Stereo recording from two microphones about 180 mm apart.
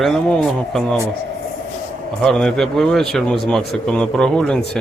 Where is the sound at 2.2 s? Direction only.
5° left (ahead or behind).